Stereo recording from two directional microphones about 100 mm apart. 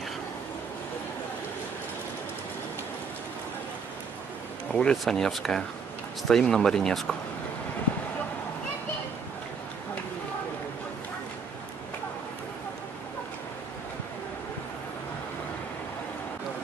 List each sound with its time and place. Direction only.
4.7 s speech: 5° left (ahead or behind)